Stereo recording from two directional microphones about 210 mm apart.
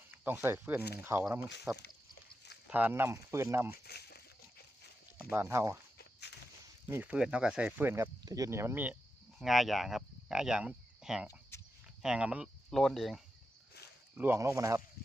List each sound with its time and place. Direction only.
0.3 s speech: 10° right (ahead or behind)
1.7 s speech: centre (ahead or behind)
3.8 s a sound: 50° left (ahead or behind)
5.3 s speech: 10° right (ahead or behind)
6.0 s walk: 55° left (ahead or behind)
6.8 s speech: 10° right (ahead or behind)
14.2 s speech: 10° right (ahead or behind)
15.0 s frying: 50° left (ahead or behind)